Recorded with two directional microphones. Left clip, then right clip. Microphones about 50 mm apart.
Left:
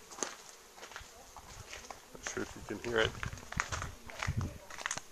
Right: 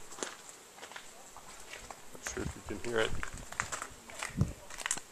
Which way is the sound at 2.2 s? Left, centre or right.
Centre.